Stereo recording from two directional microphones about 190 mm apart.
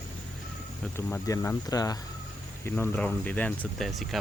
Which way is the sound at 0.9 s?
15° left (ahead or behind).